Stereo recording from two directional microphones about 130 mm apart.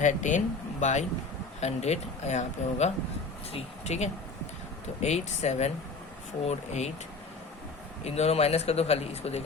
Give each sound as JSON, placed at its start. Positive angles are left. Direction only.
{"t": 0.0, "sound": "speech", "side_deg": 75}
{"t": 8.0, "sound": "speech", "side_deg": 55}